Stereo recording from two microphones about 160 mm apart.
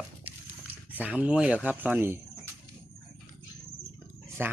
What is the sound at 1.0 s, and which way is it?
Speech, 10° right (ahead or behind).